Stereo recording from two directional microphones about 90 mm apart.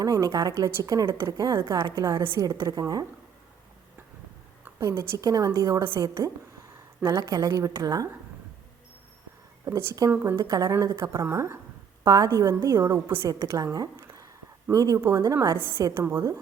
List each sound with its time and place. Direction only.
0.0 s a woman's voice: 40° right (ahead or behind)
4.8 s a woman's voice: 35° right (ahead or behind)
9.6 s a woman's voice: 35° right (ahead or behind)